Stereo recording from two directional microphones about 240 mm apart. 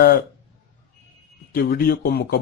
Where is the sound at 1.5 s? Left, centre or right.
Left.